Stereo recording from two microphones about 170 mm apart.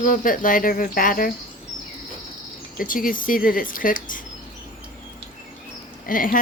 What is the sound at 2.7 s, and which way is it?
Speech, 55° left (ahead or behind).